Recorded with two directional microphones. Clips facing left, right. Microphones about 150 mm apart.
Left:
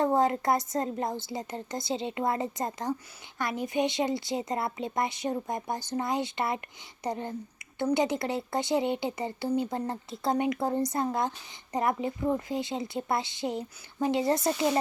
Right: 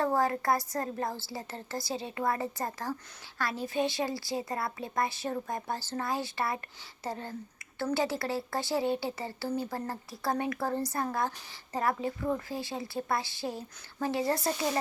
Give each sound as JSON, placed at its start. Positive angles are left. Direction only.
{"t": 0.0, "sound": "speech", "side_deg": 20}